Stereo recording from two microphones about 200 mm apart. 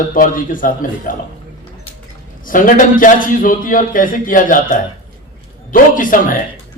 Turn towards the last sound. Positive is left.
turn(degrees=40)  # may be behind; listen again after turning